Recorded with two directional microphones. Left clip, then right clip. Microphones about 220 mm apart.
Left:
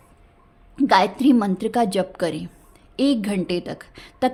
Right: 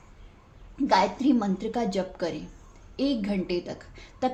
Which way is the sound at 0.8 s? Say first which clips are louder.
Left 6 dB; 45° left (ahead or behind).